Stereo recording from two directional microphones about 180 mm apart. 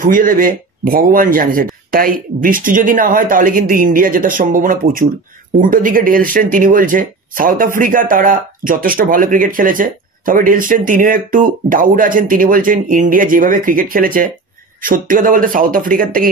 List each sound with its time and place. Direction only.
0.0 s speech: 50° right (ahead or behind)